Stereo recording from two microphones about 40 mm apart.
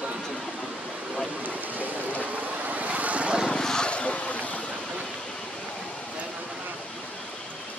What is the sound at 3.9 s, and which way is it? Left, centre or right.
Vehicle, left.